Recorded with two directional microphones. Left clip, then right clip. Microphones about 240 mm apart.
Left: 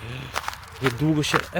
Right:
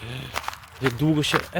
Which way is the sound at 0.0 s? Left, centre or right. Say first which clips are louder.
Left 1 dB; centre.